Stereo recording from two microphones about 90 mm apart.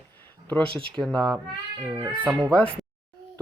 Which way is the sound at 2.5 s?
15° left (ahead or behind).